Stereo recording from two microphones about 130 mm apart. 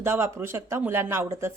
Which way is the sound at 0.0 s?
20° right (ahead or behind).